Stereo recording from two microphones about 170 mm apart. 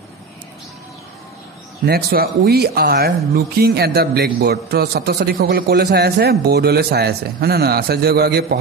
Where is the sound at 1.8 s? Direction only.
65° right (ahead or behind).